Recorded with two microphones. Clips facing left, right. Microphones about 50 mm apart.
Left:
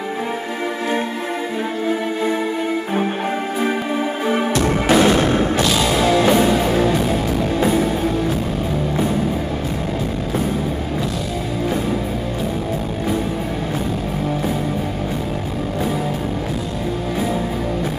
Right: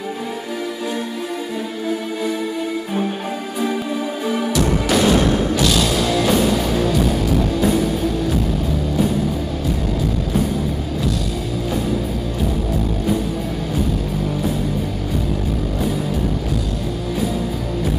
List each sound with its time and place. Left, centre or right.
3.6 s music: left